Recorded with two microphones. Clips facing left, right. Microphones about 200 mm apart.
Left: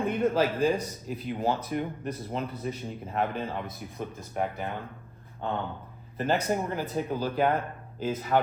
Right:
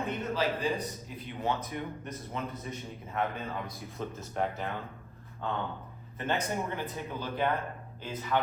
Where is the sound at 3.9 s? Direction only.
15° left (ahead or behind).